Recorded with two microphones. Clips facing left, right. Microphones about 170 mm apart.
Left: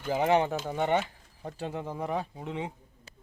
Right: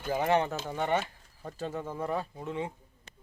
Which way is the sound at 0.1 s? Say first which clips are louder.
Left 2 dB; 15° left (ahead or behind).